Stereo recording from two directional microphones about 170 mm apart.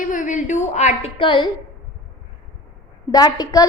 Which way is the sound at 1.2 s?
30° left (ahead or behind).